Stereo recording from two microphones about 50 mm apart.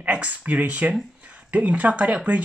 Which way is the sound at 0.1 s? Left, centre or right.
Right.